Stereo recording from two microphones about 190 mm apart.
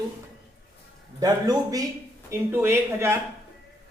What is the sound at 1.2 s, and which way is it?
Speech, 20° right (ahead or behind).